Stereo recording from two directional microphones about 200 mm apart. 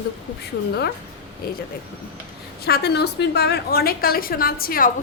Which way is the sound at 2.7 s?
55° left (ahead or behind).